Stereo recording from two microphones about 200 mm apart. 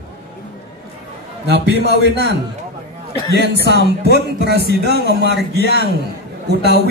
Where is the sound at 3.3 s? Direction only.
60° right (ahead or behind).